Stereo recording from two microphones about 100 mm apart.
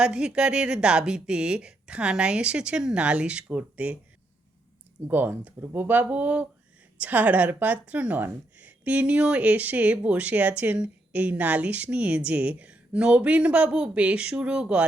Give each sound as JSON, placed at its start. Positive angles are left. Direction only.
{"t": 0.0, "sound": "a woman's voice", "side_deg": -10}
{"t": 5.0, "sound": "a woman's voice", "side_deg": -20}